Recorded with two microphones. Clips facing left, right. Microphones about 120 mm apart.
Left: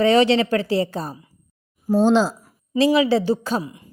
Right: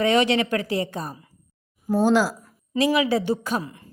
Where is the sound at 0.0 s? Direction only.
30° left (ahead or behind).